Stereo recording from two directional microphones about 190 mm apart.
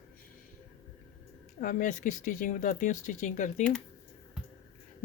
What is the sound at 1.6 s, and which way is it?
Speech, 45° left (ahead or behind).